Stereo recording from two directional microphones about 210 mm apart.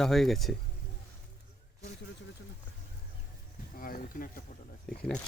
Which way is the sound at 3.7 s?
45° left (ahead or behind).